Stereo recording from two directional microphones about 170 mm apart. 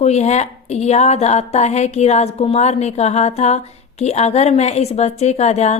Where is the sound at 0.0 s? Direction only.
40° left (ahead or behind).